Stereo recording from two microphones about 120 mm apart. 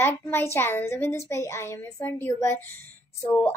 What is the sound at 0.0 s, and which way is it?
A woman's voice, 20° left (ahead or behind).